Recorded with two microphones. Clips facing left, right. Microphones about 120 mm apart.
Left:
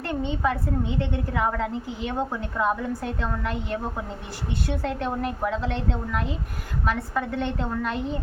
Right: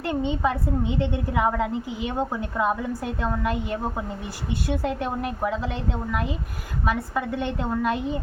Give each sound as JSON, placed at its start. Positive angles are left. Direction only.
{"t": 0.1, "sound": "a woman's voice", "side_deg": -15}